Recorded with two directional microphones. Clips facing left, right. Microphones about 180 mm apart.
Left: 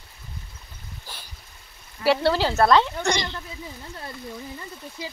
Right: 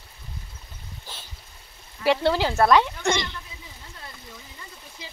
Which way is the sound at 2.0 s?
15° right (ahead or behind).